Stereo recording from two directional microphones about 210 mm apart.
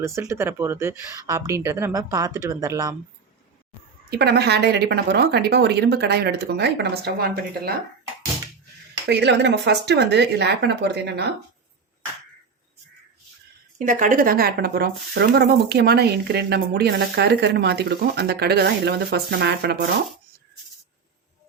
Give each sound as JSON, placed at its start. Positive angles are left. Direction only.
{"t": 0.0, "sound": "speech", "side_deg": -15}
{"t": 4.1, "sound": "speech", "side_deg": -50}
{"t": 9.0, "sound": "speech", "side_deg": -55}
{"t": 13.7, "sound": "speech", "side_deg": -40}